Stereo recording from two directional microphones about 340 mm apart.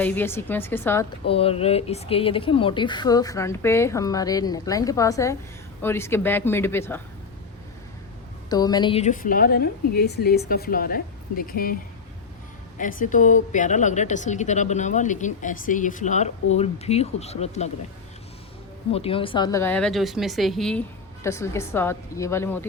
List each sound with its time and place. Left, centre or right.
0.0 s speech: centre
1.3 s speech: centre
8.4 s a woman's voice: centre
18.9 s a woman's voice: centre